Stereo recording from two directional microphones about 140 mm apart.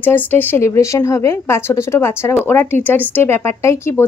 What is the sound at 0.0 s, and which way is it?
A woman's voice, 15° left (ahead or behind).